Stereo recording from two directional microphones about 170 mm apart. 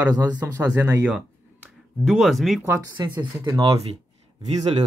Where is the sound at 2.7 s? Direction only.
20° right (ahead or behind).